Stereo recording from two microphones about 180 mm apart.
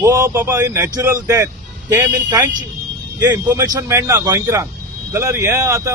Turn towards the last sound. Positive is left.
turn(degrees=-20)  # may be behind; listen again after turning